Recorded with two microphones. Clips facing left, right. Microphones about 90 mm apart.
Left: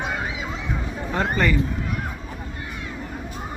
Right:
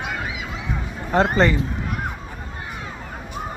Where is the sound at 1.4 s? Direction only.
30° right (ahead or behind).